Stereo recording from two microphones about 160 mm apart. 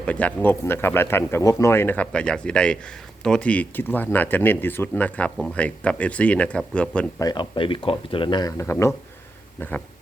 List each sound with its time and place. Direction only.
0.0 s speech: 10° left (ahead or behind)
7.2 s speech: 25° left (ahead or behind); by 9.8 s 10° left (ahead or behind)